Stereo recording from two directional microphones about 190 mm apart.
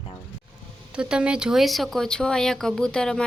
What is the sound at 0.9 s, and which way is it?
Speech, 5° right (ahead or behind).